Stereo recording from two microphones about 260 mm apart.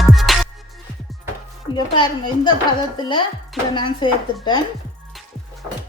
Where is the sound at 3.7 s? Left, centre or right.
Centre.